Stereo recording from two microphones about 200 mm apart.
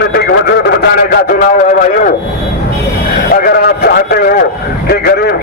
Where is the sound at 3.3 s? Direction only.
50° left (ahead or behind).